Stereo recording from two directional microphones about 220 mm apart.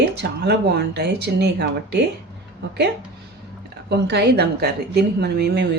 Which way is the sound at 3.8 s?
50° right (ahead or behind).